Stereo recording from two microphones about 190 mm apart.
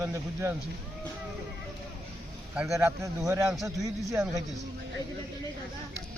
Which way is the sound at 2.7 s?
15° right (ahead or behind).